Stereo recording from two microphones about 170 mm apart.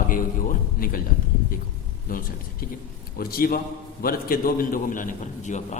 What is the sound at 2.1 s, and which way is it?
A man's voice, 55° left (ahead or behind).